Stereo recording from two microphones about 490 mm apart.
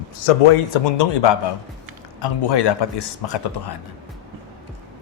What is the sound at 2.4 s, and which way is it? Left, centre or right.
Speech, left.